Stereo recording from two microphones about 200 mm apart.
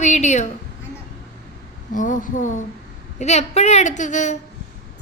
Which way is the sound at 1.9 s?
40° left (ahead or behind).